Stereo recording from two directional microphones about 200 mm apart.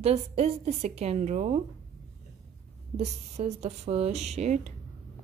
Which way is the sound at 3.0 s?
35° right (ahead or behind).